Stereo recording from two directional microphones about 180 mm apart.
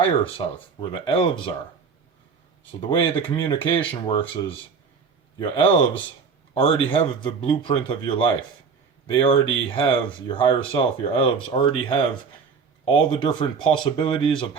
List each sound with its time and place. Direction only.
0.0 s speech: 30° left (ahead or behind)
3.0 s speech: 30° left (ahead or behind)